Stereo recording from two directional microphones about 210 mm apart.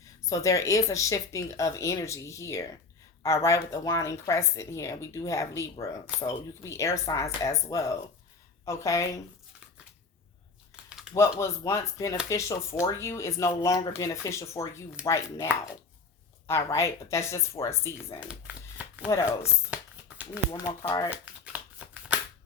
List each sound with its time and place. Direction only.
0.3 s speech: 15° left (ahead or behind)
10.8 s typing: 5° right (ahead or behind)
11.1 s speech: 15° left (ahead or behind)
16.5 s speech: 15° left (ahead or behind)
18.8 s shuffling cards: 5° right (ahead or behind)
19.7 s a sound: 10° right (ahead or behind)
20.5 s speech: 15° left (ahead or behind)
21.1 s shuffling cards: 5° right (ahead or behind)